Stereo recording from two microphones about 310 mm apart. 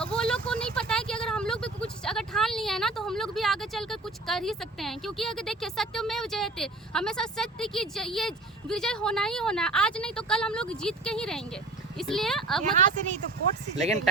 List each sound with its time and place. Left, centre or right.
0.0 s speech: centre
12.7 s speech: right